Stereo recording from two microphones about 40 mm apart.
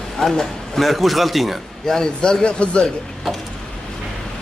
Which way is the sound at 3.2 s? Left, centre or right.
Centre.